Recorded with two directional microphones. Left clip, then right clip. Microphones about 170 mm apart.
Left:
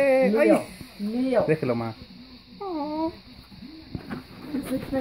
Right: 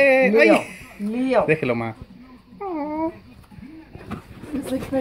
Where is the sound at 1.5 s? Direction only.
5° right (ahead or behind).